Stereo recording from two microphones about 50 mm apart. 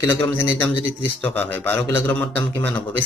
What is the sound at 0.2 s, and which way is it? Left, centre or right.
A man's voice, left.